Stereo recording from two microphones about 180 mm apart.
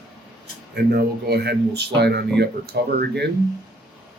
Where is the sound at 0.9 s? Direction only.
65° right (ahead or behind).